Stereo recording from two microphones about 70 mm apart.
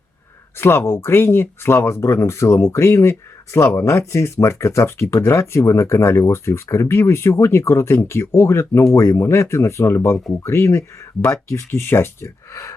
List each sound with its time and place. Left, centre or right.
0.6 s speech: left